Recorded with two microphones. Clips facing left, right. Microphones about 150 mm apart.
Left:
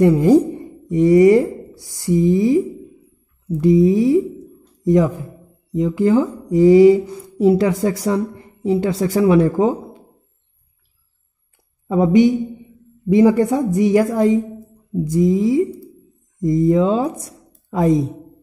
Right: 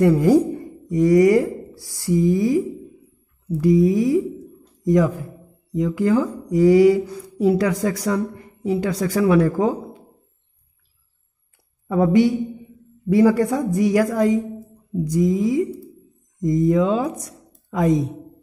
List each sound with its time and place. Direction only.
0.0 s speech: 20° left (ahead or behind)
11.9 s a woman's voice: 20° left (ahead or behind)